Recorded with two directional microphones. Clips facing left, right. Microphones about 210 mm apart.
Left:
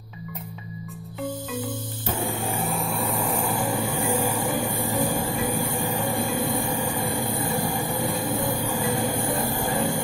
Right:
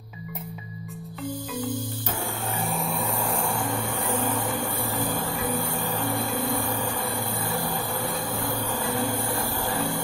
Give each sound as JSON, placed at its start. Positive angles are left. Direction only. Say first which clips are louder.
{"t": 2.1, "sound": "printer", "louder": "left 5 dB", "side_deg": 20}
{"t": 2.6, "sound": "vehicle", "louder": "right 1 dB", "side_deg": 0}